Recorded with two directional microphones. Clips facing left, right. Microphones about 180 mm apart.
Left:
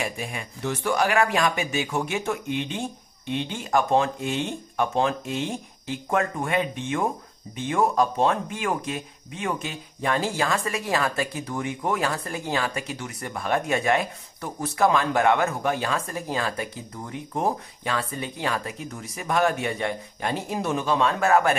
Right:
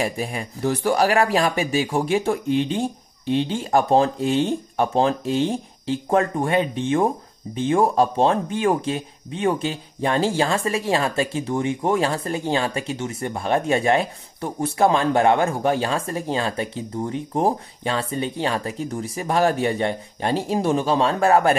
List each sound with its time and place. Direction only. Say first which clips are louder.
0.0 s speech: right 6 dB; 35° right (ahead or behind)